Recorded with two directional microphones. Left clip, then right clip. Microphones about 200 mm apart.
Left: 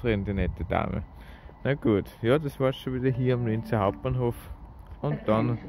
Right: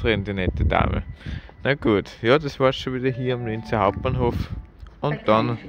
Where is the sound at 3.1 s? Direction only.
10° left (ahead or behind).